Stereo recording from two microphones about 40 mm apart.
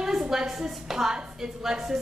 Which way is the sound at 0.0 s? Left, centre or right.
Centre.